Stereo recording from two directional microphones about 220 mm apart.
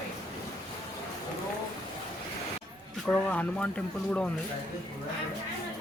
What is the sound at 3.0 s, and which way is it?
Speech, 5° left (ahead or behind).